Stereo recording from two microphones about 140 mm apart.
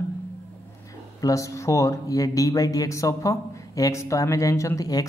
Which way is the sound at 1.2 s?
25° left (ahead or behind).